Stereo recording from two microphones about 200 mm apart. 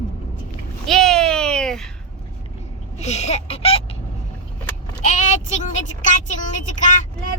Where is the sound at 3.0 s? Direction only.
35° left (ahead or behind).